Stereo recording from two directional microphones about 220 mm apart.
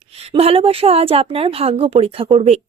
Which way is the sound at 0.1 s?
25° right (ahead or behind).